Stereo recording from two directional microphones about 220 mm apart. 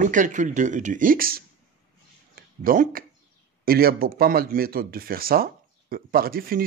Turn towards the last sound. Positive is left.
turn(degrees=-40)  # may be behind; listen again after turning